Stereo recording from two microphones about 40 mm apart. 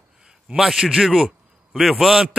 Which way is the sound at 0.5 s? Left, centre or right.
Centre.